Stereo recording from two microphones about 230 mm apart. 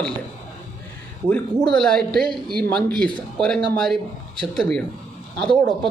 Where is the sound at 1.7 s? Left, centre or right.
Centre.